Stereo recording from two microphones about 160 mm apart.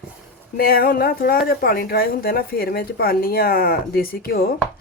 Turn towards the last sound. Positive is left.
turn(degrees=70)  # may be behind; listen again after turning